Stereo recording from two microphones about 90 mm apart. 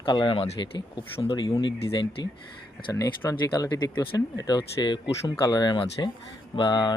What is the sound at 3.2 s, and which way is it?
Speech, 45° left (ahead or behind).